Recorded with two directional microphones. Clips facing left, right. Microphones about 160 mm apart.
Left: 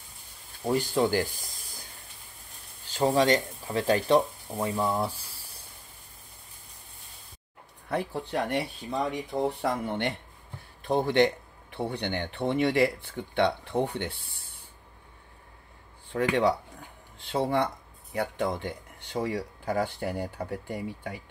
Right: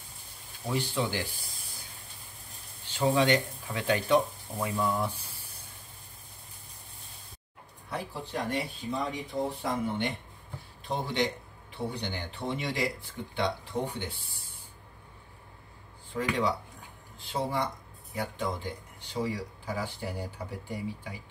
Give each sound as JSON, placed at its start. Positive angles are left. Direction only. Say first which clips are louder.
{"t": 0.7, "sound": "speech", "louder": "left 6 dB", "side_deg": 40}
{"t": 2.9, "sound": "speech", "louder": "left 2 dB", "side_deg": 35}
{"t": 7.9, "sound": "speech", "louder": "left 6 dB", "side_deg": 60}
{"t": 10.8, "sound": "speech", "louder": "left 7 dB", "side_deg": 55}
{"t": 16.1, "sound": "speech", "louder": "left 5 dB", "side_deg": 60}